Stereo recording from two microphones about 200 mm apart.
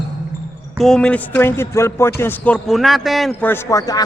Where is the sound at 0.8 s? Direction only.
5° left (ahead or behind).